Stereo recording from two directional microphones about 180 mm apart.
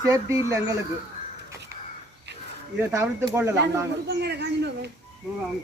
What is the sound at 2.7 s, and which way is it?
Speech, 15° right (ahead or behind).